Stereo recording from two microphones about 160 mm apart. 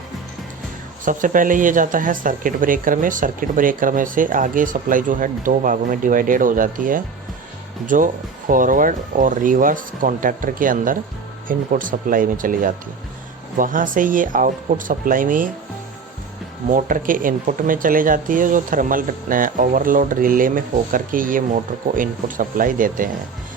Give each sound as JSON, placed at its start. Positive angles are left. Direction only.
{"t": 1.0, "sound": "speech", "side_deg": -55}
{"t": 16.6, "sound": "speech", "side_deg": -55}